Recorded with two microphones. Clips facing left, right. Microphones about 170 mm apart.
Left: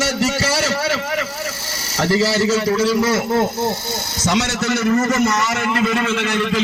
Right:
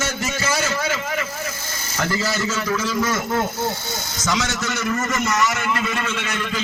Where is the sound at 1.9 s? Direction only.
35° left (ahead or behind).